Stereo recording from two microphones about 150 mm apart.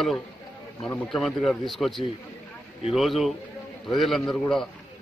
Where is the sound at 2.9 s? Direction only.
Centre (ahead or behind).